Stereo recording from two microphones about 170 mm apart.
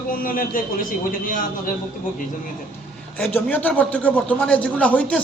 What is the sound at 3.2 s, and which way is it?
A man's voice, 10° left (ahead or behind).